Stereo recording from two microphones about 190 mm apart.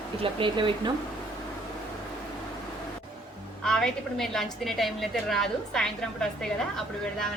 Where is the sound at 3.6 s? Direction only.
5° left (ahead or behind).